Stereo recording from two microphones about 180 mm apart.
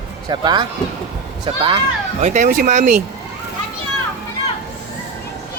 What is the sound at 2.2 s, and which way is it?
Speech, 45° right (ahead or behind).